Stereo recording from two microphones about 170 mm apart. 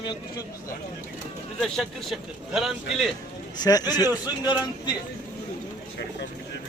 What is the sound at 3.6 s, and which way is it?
Speech, 20° left (ahead or behind).